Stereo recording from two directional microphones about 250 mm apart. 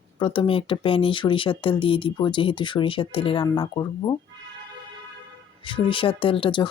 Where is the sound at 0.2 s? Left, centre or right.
Left.